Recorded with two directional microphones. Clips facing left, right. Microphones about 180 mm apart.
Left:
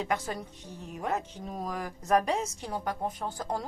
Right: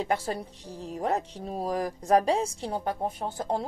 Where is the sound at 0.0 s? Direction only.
30° right (ahead or behind).